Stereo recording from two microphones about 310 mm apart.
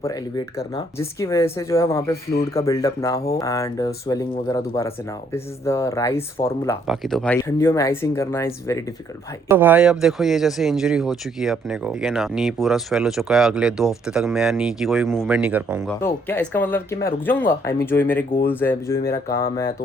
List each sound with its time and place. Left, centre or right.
0.0 s speech: centre
2.3 s speech: centre
6.8 s speech: centre
9.5 s speech: centre
16.0 s speech: centre
19.3 s speech: left